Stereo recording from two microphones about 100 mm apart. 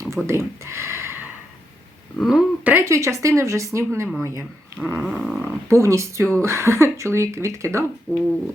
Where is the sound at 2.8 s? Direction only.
30° right (ahead or behind).